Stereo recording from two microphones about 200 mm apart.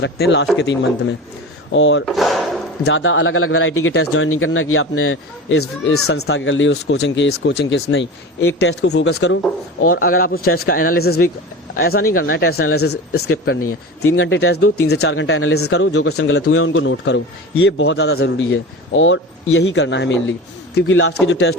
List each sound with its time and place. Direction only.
0.0 s speech: 60° left (ahead or behind)
2.0 s drawer open or close: centre (ahead or behind)
2.8 s speech: 75° left (ahead or behind)
6.1 s speech: 65° left (ahead or behind)
10.0 s speech: 45° left (ahead or behind)
12.5 s speech: 90° left
14.2 s speech: 70° left (ahead or behind)
15.0 s a man's voice: 70° left (ahead or behind)
20.8 s a man's voice: 85° left; by 21.5 s 60° left (ahead or behind)